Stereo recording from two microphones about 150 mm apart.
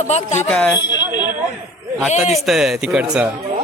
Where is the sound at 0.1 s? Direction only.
50° left (ahead or behind).